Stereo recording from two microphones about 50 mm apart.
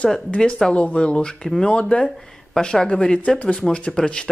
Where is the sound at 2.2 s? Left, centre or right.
Centre.